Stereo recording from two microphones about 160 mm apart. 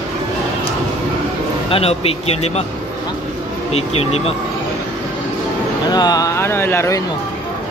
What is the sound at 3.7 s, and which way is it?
Speech, 40° left (ahead or behind).